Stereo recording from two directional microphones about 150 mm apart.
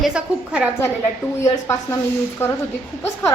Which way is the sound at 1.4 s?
20° left (ahead or behind).